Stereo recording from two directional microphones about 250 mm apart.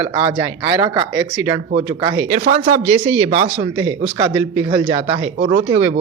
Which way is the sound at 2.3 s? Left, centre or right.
Right.